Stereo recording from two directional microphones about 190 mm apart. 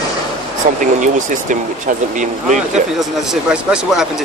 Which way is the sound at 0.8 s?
40° right (ahead or behind).